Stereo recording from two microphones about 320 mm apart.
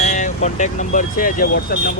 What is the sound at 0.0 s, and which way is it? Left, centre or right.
Speech, left.